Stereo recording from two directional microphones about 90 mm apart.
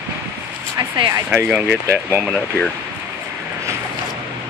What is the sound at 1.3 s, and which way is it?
Speech, 20° right (ahead or behind).